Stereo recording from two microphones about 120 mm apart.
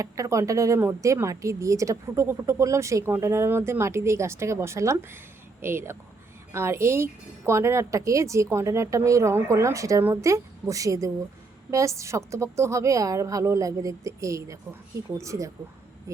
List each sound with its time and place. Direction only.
0.0 s speech: 25° right (ahead or behind)